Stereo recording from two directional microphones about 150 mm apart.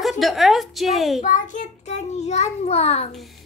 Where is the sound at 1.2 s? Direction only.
55° left (ahead or behind).